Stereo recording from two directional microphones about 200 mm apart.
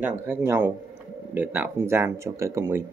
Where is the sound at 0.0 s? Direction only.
10° right (ahead or behind).